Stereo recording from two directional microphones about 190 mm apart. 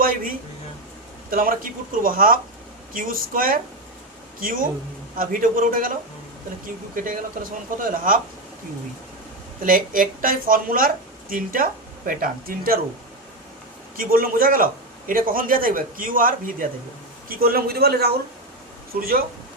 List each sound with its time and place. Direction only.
1.3 s speech: 50° right (ahead or behind)
6.9 s speech: 45° right (ahead or behind)
9.6 s speech: 45° right (ahead or behind)
13.9 s a man's voice: 50° right (ahead or behind)